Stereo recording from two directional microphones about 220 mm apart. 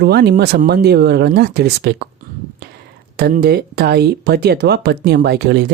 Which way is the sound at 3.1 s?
45° right (ahead or behind).